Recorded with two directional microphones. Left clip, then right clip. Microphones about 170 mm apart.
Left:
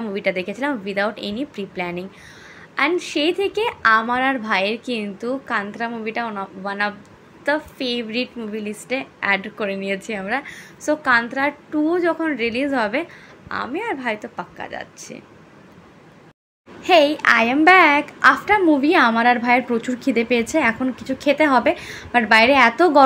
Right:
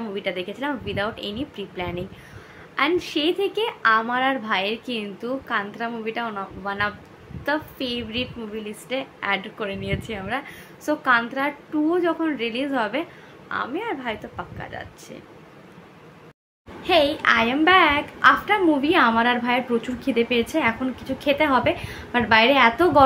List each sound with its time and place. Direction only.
0.1 s a woman's voice: 30° left (ahead or behind)
16.8 s a woman's voice: 35° left (ahead or behind)